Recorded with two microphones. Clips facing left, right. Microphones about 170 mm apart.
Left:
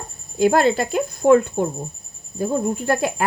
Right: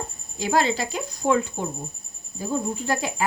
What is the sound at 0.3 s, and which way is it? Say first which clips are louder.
Speech: left 6 dB; 55° left (ahead or behind).